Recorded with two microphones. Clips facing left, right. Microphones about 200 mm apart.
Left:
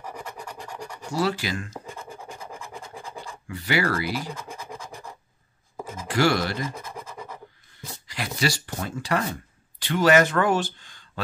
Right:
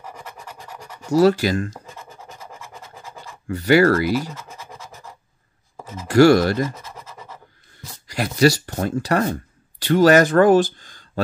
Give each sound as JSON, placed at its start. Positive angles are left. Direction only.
{"t": 0.6, "sound": "scratch", "side_deg": -5}
{"t": 1.1, "sound": "speech", "side_deg": -40}
{"t": 1.7, "sound": "scratch", "side_deg": 0}
{"t": 3.4, "sound": "speech", "side_deg": -45}
{"t": 4.6, "sound": "scratch", "side_deg": -5}
{"t": 6.0, "sound": "speech", "side_deg": -45}
{"t": 6.7, "sound": "scratch", "side_deg": 10}
{"t": 8.1, "sound": "speech", "side_deg": -45}